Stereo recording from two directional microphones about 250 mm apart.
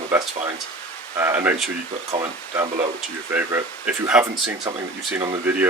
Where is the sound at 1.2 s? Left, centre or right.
Centre.